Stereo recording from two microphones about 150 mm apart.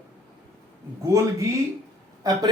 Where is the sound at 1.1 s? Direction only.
20° right (ahead or behind).